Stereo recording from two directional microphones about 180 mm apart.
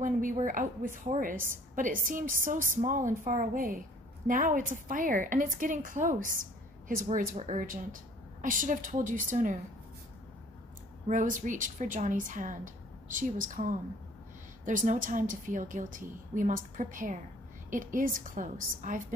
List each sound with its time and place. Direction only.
0.0 s a woman's voice: 45° right (ahead or behind)
11.1 s a woman's voice: 45° right (ahead or behind)